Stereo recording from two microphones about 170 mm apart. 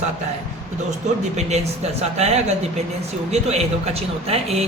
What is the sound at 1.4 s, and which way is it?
Speech, 40° right (ahead or behind).